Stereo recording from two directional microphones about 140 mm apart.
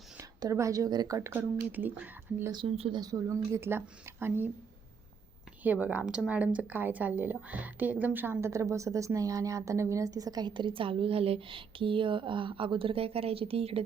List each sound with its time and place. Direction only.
0.2 s speech: 25° right (ahead or behind)
2.5 s speech: 40° right (ahead or behind)
3.0 s speech: 25° right (ahead or behind)
5.6 s speech: 10° right (ahead or behind); by 13.8 s 45° right (ahead or behind)